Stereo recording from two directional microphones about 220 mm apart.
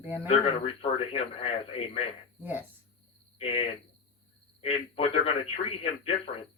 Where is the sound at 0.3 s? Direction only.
25° left (ahead or behind).